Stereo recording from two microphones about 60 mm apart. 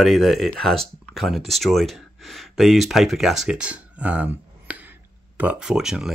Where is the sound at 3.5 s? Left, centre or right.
Right.